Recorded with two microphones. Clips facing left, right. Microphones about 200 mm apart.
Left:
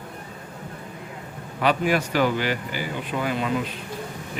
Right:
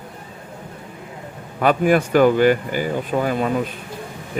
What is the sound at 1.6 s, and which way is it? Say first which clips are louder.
Speech: right 6 dB; 50° right (ahead or behind).